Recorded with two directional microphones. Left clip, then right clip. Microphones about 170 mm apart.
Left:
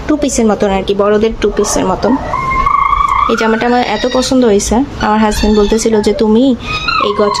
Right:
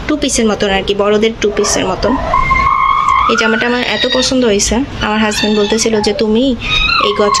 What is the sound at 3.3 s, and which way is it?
Speech, 10° left (ahead or behind).